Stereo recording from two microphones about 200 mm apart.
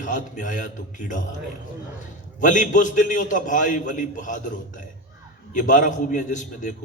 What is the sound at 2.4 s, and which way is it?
A man's voice, 40° left (ahead or behind).